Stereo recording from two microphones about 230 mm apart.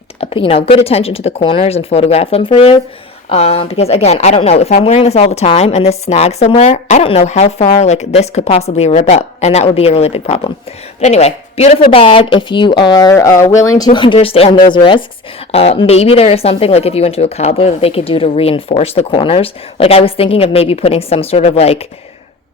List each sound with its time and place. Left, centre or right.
0.2 s a woman's voice: left